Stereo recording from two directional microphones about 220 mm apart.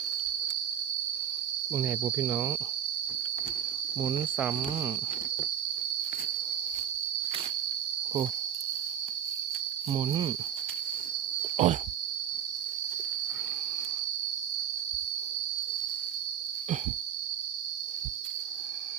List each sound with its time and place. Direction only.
1.7 s cricket: 10° right (ahead or behind)
4.0 s cricket: 10° right (ahead or behind)
9.9 s speech: 20° right (ahead or behind)
11.5 s wild animals: 30° right (ahead or behind)